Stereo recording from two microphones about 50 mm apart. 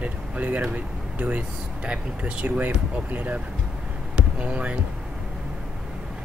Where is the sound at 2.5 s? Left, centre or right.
Right.